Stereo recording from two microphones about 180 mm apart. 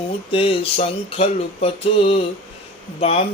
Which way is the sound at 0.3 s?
30° left (ahead or behind).